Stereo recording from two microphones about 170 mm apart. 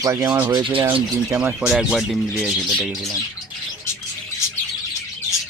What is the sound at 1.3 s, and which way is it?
Speech, 5° right (ahead or behind).